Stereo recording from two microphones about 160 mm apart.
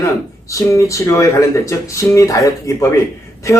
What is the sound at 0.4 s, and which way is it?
Speech, 20° left (ahead or behind).